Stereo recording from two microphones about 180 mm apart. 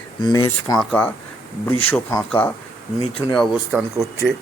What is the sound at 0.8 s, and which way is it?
Speech, 10° left (ahead or behind).